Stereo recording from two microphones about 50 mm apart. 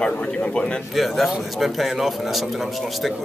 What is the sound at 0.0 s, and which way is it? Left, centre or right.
Speech, centre.